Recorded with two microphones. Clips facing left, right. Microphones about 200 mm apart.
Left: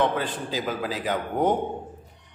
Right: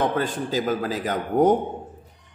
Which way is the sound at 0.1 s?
45° right (ahead or behind).